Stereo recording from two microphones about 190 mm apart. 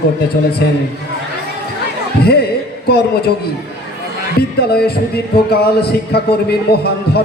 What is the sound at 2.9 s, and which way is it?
Speech, 55° left (ahead or behind).